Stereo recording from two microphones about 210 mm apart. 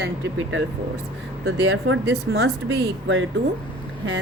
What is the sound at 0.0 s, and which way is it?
Speech, 70° right (ahead or behind).